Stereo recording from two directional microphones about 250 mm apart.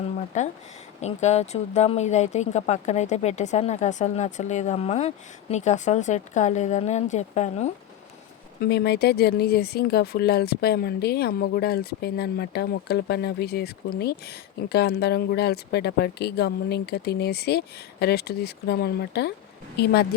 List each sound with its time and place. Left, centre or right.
0.3 s speech: left
8.6 s speech: left